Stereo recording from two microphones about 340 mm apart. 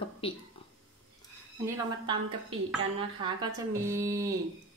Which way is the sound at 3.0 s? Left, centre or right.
Centre.